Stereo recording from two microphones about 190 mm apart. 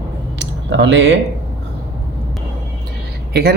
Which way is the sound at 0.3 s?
70° right (ahead or behind).